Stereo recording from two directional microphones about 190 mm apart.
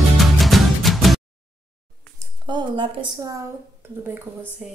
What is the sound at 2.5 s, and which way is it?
Speech, 25° right (ahead or behind).